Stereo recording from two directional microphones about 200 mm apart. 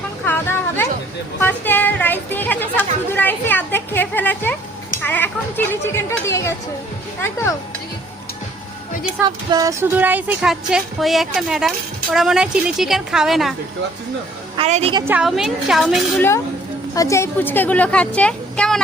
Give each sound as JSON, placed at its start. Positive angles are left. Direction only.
{"t": 0.3, "sound": "a sound", "side_deg": 10}
{"t": 1.4, "sound": "speech", "side_deg": 10}
{"t": 9.5, "sound": "speech", "side_deg": -15}
{"t": 14.5, "sound": "a woman's voice", "side_deg": -30}
{"t": 14.9, "sound": "speech", "side_deg": -10}
{"t": 16.9, "sound": "speech", "side_deg": 15}